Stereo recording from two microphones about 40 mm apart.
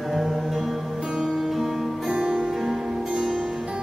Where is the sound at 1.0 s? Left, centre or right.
Centre.